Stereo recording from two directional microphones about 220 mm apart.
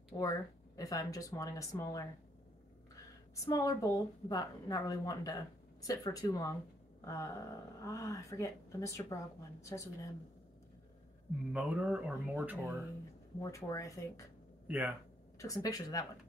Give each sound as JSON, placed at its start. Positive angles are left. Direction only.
{"t": 0.2, "sound": "a woman's voice", "side_deg": 15}
{"t": 3.3, "sound": "a woman's voice", "side_deg": 15}
{"t": 11.5, "sound": "speech", "side_deg": -5}
{"t": 13.4, "sound": "a woman's voice", "side_deg": 15}
{"t": 14.7, "sound": "speech", "side_deg": -5}
{"t": 15.3, "sound": "a woman's voice", "side_deg": 15}